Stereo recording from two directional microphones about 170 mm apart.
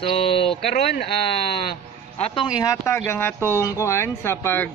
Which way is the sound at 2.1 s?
35° left (ahead or behind).